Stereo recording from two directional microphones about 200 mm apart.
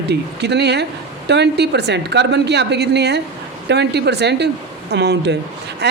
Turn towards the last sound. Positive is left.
turn(degrees=-55)  # may be behind; listen again after turning